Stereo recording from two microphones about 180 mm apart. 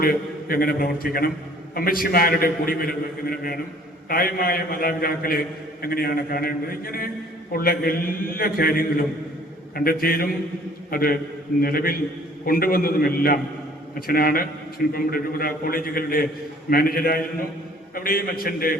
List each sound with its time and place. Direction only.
0.0 s a man's voice: 55° left (ahead or behind)